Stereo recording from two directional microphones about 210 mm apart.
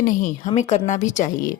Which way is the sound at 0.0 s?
35° left (ahead or behind).